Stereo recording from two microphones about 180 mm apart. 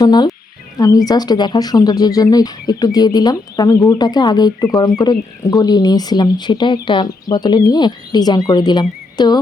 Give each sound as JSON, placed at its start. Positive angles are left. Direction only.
{"t": 0.0, "sound": "speech", "side_deg": 25}